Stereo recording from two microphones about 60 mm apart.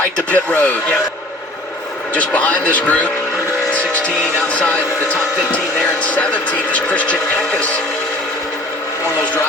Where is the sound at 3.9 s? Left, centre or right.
Left.